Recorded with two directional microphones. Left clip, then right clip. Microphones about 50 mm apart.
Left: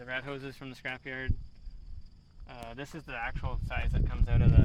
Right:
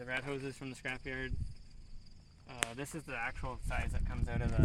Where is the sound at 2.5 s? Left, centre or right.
Centre.